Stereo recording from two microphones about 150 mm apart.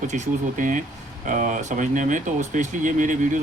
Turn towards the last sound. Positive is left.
turn(degrees=-60)  # may be behind; listen again after turning